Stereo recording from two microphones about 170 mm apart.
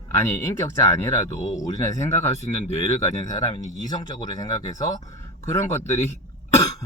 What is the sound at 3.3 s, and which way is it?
Speech, 20° left (ahead or behind).